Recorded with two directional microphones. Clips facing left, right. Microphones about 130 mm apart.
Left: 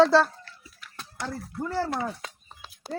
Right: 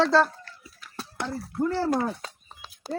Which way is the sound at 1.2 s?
55° right (ahead or behind).